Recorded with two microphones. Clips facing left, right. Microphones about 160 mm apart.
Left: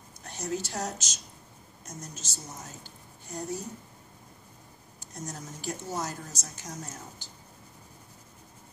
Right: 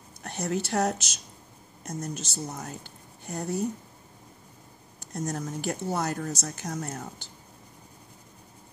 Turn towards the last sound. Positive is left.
turn(degrees=-60)  # may be behind; listen again after turning